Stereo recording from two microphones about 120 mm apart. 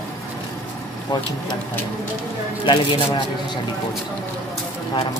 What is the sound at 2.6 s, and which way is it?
Speech, 45° left (ahead or behind).